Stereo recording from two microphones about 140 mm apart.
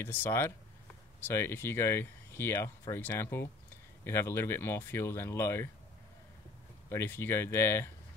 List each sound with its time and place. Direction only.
0.0 s speech: 15° left (ahead or behind)
6.9 s speech: 20° left (ahead or behind)